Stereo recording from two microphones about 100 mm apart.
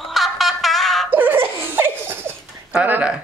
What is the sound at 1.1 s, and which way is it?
Laughter, 20° right (ahead or behind).